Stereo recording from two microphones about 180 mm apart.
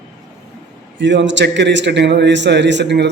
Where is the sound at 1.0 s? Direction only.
90° right; by 3.0 s 75° right (ahead or behind).